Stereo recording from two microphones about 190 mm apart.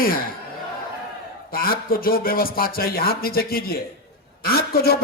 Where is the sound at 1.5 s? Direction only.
50° left (ahead or behind).